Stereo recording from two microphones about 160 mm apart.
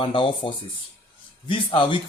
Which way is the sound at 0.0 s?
30° left (ahead or behind).